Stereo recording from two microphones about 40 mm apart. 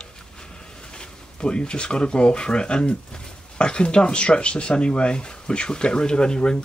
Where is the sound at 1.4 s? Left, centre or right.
Left.